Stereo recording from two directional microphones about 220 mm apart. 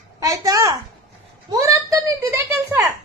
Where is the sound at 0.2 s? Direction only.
15° right (ahead or behind).